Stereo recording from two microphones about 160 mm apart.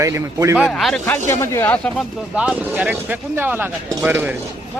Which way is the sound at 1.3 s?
20° left (ahead or behind).